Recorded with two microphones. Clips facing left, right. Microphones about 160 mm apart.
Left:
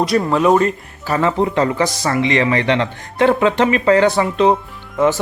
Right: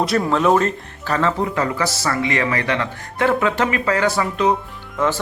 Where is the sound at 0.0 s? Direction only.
Centre (ahead or behind).